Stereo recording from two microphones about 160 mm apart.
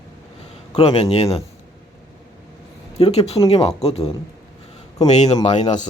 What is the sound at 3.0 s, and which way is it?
Speech, 40° left (ahead or behind).